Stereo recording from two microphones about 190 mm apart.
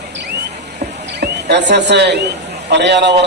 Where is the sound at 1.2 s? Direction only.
65° right (ahead or behind).